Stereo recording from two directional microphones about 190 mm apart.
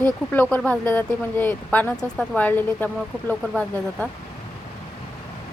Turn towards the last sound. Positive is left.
turn(degrees=5)  # may be behind; listen again after turning